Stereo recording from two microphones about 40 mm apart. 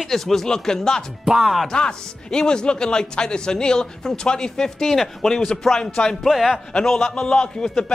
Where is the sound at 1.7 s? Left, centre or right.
Left.